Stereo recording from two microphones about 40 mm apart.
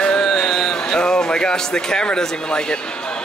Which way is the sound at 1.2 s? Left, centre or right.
Centre.